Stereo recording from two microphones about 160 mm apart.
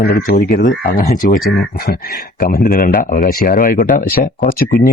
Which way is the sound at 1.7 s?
75° left (ahead or behind).